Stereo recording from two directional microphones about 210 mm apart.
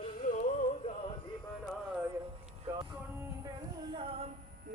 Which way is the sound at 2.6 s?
15° right (ahead or behind).